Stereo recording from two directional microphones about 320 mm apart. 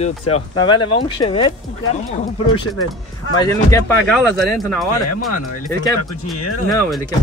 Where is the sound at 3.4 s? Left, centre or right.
Centre.